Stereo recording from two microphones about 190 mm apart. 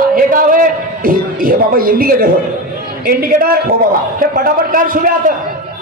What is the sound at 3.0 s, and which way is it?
A man's voice, 50° right (ahead or behind).